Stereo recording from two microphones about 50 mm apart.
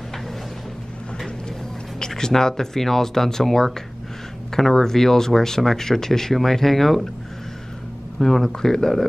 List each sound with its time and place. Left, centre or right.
2.0 s speech: centre
8.2 s speech: centre